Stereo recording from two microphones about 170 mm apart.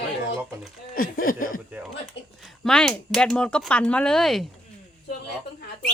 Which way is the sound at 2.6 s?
5° left (ahead or behind).